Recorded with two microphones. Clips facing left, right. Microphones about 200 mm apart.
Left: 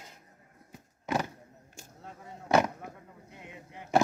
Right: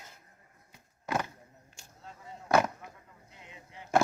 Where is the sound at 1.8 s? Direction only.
50° left (ahead or behind).